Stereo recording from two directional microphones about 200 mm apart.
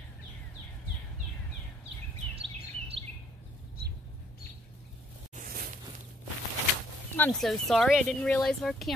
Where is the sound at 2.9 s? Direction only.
30° right (ahead or behind).